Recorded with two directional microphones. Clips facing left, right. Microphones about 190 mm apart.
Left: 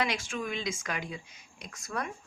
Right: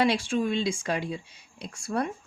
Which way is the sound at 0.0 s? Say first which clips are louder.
Right 8 dB; 30° right (ahead or behind).